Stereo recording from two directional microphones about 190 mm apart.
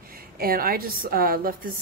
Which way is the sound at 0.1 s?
50° right (ahead or behind).